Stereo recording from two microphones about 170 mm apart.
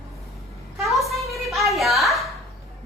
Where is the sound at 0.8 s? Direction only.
Centre (ahead or behind).